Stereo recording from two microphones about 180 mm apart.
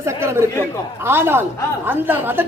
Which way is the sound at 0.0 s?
15° right (ahead or behind).